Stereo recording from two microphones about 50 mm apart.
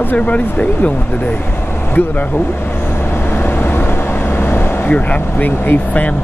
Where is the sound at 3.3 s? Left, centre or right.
Left.